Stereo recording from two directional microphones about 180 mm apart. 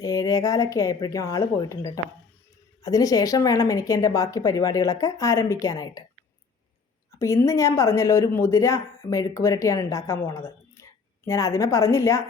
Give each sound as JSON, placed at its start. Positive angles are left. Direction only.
{"t": 0.0, "sound": "speech", "side_deg": 20}
{"t": 7.2, "sound": "speech", "side_deg": 15}